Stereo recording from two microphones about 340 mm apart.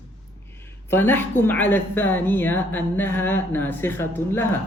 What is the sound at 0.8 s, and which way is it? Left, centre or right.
A woman's voice, centre.